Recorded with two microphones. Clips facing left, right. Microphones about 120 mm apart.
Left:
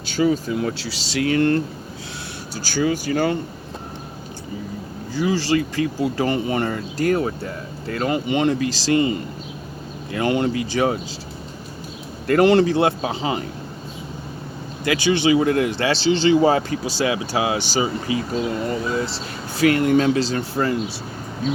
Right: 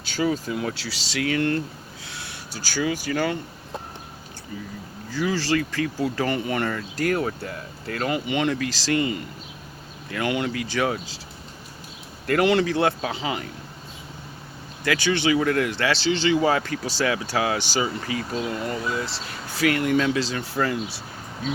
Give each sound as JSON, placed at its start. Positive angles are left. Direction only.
{"t": 0.2, "sound": "speech", "side_deg": 30}
{"t": 5.1, "sound": "speech", "side_deg": 25}
{"t": 12.3, "sound": "speech", "side_deg": 35}
{"t": 12.7, "sound": "speech", "side_deg": 20}
{"t": 14.8, "sound": "speech", "side_deg": 15}
{"t": 16.8, "sound": "speech", "side_deg": 15}